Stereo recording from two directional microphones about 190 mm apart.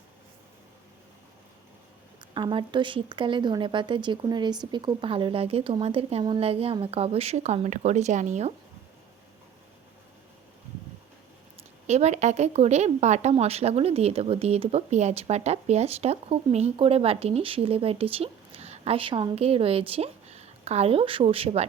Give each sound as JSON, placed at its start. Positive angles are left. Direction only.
{"t": 2.3, "sound": "speech", "side_deg": -25}
{"t": 11.9, "sound": "speech", "side_deg": -35}